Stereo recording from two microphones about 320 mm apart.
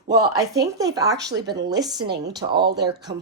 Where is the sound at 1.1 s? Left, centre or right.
Right.